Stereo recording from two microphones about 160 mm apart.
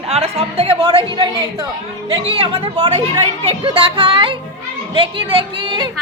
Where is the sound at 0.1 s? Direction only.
40° right (ahead or behind).